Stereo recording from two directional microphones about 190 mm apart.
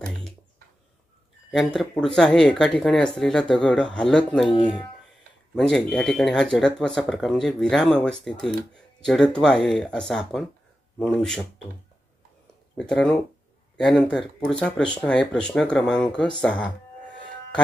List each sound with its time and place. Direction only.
1.5 s speech: centre (ahead or behind)
5.5 s speech: centre (ahead or behind)
12.9 s speech: 5° left (ahead or behind)
14.6 s speech: 5° left (ahead or behind)
16.3 s a sound: 5° left (ahead or behind)